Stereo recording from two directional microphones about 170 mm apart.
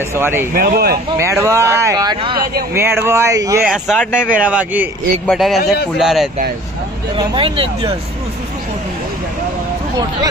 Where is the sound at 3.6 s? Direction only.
5° right (ahead or behind).